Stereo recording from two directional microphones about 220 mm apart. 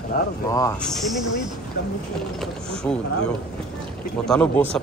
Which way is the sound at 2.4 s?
5° left (ahead or behind).